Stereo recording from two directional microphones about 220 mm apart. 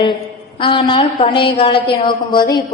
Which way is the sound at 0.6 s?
20° left (ahead or behind).